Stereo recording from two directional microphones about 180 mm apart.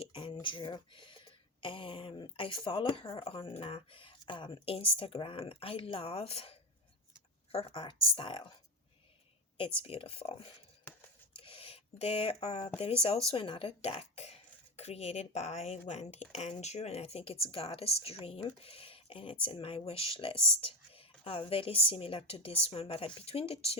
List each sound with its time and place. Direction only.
0.0 s a sound: 30° left (ahead or behind)
1.6 s speech: 30° left (ahead or behind)
9.8 s speech: 30° left (ahead or behind)